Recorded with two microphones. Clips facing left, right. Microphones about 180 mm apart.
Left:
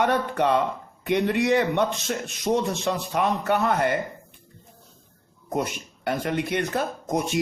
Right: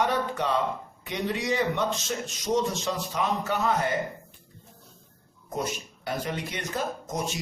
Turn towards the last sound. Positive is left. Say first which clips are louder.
# left 4 dB
turn(degrees=60)  # may be behind; listen again after turning